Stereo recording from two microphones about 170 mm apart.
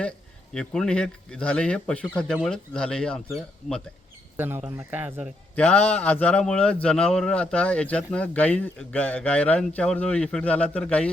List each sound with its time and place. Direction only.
0.5 s speech: 5° left (ahead or behind)
4.4 s speech: 10° right (ahead or behind)
5.5 s a man's voice: 10° left (ahead or behind)